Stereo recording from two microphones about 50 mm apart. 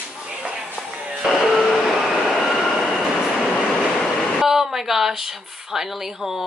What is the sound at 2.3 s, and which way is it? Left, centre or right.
Train, centre.